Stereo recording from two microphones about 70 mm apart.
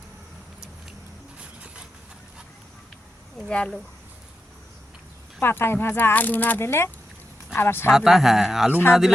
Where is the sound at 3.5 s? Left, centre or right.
Centre.